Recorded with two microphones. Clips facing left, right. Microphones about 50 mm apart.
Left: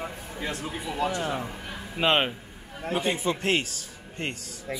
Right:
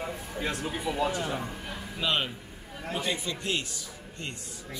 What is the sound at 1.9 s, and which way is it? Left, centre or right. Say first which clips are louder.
Speech: left 6 dB; left.